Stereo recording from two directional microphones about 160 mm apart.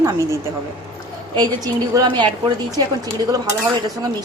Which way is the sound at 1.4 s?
25° right (ahead or behind).